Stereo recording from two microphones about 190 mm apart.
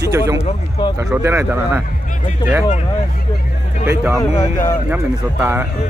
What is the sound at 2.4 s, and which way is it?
Speech, 20° left (ahead or behind).